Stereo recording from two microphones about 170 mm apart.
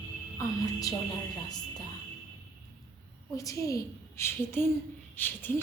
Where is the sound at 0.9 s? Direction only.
20° left (ahead or behind).